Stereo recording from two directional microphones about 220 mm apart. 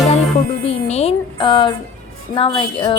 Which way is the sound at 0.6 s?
30° left (ahead or behind).